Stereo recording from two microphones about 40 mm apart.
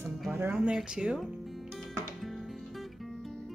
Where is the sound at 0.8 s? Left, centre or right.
Centre.